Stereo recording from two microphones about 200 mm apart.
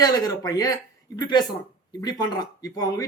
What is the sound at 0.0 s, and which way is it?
Speech, 20° left (ahead or behind).